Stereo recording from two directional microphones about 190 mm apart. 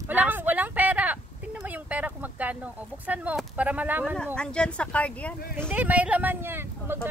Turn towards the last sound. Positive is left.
turn(degrees=-10)  # may be behind; listen again after turning